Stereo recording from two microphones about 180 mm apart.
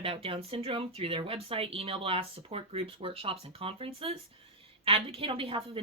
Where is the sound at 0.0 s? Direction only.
30° right (ahead or behind).